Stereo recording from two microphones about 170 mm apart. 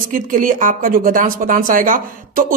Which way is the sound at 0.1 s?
55° right (ahead or behind).